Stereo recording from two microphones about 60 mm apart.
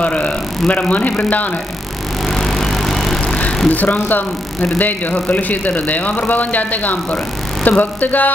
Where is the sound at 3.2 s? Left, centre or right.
Centre.